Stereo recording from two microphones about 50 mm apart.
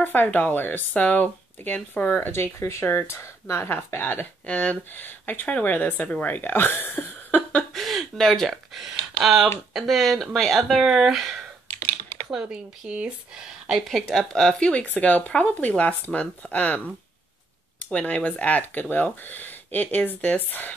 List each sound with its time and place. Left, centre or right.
0.0 s speech: left
2.3 s speech: left
4.5 s speech: left
7.7 s a sound: centre
8.8 s speech: centre
10.8 s speech: centre
12.3 s speech: centre
13.7 s speech: centre; by 16.9 s left
17.9 s speech: left